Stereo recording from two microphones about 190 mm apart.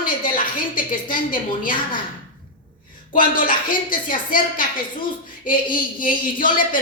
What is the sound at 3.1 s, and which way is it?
A woman's voice, 45° left (ahead or behind).